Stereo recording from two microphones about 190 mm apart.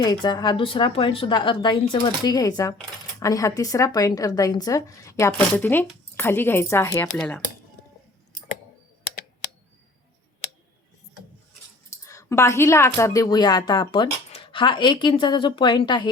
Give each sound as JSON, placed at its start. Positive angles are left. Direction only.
{"t": 0.0, "sound": "a woman's voice", "side_deg": 20}
{"t": 7.1, "sound": "speech", "side_deg": 5}
{"t": 12.0, "sound": "a woman's voice", "side_deg": 15}